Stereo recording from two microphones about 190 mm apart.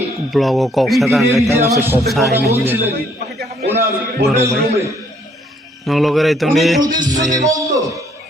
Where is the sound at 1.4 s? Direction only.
15° right (ahead or behind).